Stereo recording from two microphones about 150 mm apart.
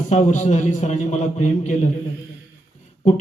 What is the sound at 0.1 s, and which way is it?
Speech, 55° left (ahead or behind).